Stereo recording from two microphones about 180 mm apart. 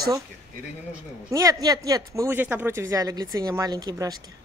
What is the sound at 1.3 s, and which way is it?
Speech, 20° right (ahead or behind).